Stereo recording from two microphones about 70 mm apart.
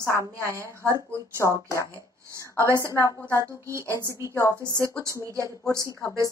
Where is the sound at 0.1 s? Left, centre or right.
Right.